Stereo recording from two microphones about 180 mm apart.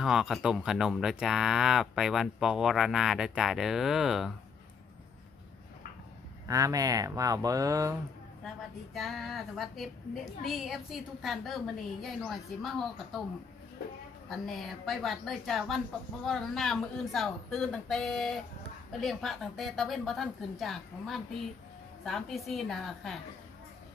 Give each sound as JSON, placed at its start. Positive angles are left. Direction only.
{"t": 0.0, "sound": "speech", "side_deg": 0}
{"t": 6.4, "sound": "speech", "side_deg": -20}
{"t": 8.9, "sound": "speech", "side_deg": 0}
{"t": 14.3, "sound": "speech", "side_deg": 0}